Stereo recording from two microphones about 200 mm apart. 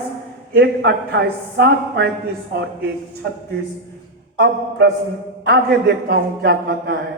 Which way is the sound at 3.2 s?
55° right (ahead or behind).